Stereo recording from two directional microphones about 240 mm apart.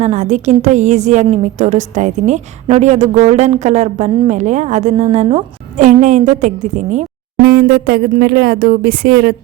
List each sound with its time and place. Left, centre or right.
0.0 s a woman's voice: right